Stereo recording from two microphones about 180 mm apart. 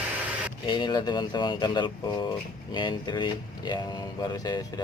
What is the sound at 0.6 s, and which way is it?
Speech, 25° left (ahead or behind).